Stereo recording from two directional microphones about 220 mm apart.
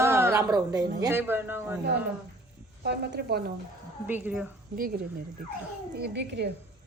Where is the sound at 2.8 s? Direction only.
45° right (ahead or behind).